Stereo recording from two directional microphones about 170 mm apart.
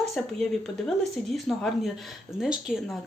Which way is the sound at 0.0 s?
Centre (ahead or behind).